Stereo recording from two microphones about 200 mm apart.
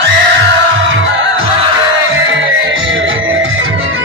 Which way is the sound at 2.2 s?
70° right (ahead or behind).